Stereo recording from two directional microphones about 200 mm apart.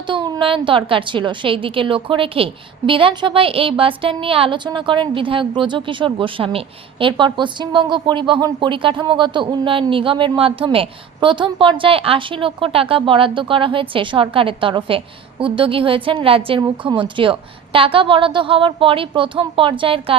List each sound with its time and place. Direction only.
0.1 s a woman's voice: 25° right (ahead or behind)